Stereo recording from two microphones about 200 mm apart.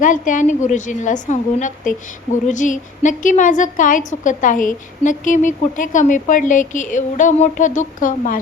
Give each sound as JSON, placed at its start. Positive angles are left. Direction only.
{"t": 0.0, "sound": "a woman's voice", "side_deg": 40}